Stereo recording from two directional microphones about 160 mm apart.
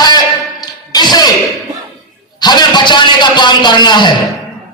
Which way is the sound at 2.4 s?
25° left (ahead or behind).